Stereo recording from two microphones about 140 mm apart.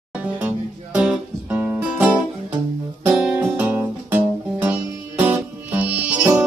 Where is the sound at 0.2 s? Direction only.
10° right (ahead or behind).